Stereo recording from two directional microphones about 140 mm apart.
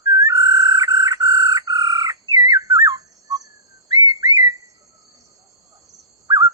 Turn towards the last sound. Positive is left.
turn(degrees=-25)  # may be behind; listen again after turning